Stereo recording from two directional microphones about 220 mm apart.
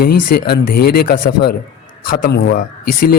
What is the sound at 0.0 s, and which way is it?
Speech, 45° left (ahead or behind).